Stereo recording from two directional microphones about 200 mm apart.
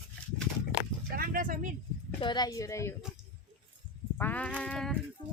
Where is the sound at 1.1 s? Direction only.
45° right (ahead or behind).